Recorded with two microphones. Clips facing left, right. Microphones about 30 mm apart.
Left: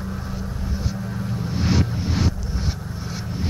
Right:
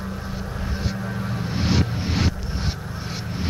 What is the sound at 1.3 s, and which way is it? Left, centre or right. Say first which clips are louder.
Music: left 1 dB; right.